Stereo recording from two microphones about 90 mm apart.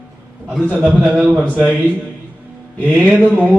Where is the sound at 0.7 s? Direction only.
15° right (ahead or behind).